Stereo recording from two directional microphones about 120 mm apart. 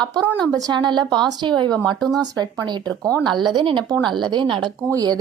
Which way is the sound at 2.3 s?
35° right (ahead or behind).